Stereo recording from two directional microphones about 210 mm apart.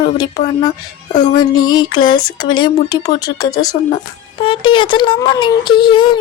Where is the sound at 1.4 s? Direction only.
20° left (ahead or behind).